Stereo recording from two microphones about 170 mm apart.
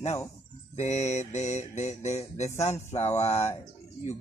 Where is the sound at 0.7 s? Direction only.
40° left (ahead or behind).